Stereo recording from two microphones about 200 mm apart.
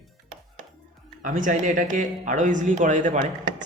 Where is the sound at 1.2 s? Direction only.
40° right (ahead or behind).